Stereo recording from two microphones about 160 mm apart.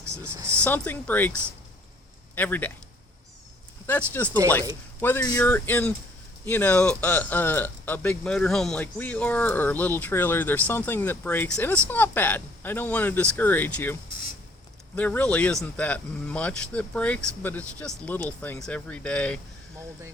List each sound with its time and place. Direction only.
0.0 s speech: 15° right (ahead or behind)
0.5 s speech: 10° left (ahead or behind)
2.3 s speech: 10° left (ahead or behind)
3.8 s speech: 10° left (ahead or behind)
14.9 s speech: 10° left (ahead or behind)